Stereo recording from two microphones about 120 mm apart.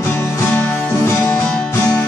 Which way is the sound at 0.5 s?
15° left (ahead or behind).